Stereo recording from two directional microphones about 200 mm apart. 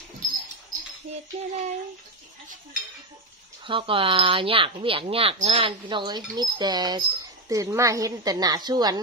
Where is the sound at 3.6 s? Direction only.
25° right (ahead or behind).